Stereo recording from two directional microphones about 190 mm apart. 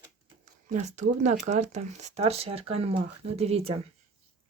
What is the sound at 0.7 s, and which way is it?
Speech, 40° right (ahead or behind).